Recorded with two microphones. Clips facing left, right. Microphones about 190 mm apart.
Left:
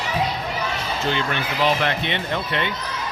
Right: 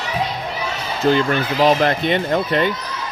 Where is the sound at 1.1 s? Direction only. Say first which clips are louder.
Right 7 dB; 40° right (ahead or behind).